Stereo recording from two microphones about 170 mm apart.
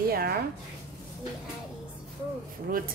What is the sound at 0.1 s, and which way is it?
Speech, 65° right (ahead or behind).